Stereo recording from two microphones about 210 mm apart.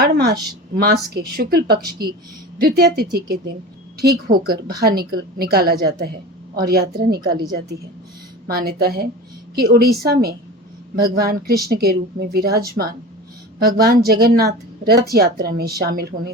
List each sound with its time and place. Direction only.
0.0 s speech: 50° right (ahead or behind)
8.4 s speech: 45° right (ahead or behind)